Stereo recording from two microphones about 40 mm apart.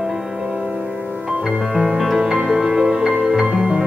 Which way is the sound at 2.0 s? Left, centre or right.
Centre.